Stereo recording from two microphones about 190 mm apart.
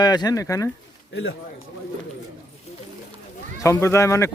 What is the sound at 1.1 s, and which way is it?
Speech, 90° left.